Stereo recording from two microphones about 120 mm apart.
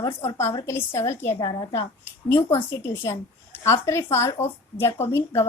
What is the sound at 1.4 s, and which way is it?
Speech, 35° left (ahead or behind).